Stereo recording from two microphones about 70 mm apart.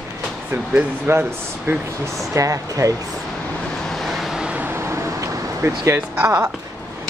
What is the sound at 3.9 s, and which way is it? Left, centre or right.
Vehicle, centre.